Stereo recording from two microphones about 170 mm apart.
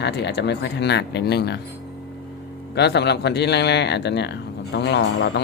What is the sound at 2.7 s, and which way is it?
Speech, 80° left.